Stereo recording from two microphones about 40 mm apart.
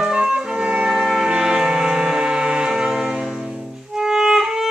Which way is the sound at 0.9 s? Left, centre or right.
Centre.